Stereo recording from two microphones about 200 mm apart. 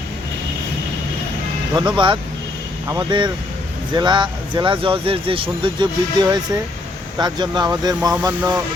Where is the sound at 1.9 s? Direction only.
25° right (ahead or behind).